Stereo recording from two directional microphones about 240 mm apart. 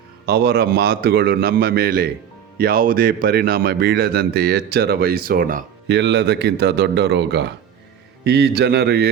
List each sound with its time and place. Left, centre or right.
0.3 s speech: right